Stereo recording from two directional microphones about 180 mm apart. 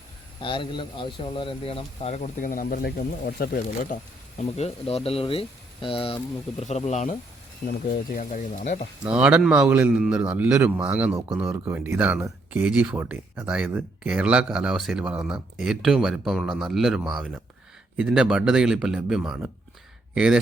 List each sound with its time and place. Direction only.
0.4 s speech: 25° left (ahead or behind); by 3.9 s 55° left (ahead or behind)
4.4 s speech: 35° left (ahead or behind)
7.7 s speech: 50° left (ahead or behind)
9.0 s a man's voice: 5° right (ahead or behind)